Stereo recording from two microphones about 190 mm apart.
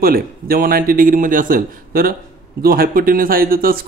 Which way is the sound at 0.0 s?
50° right (ahead or behind).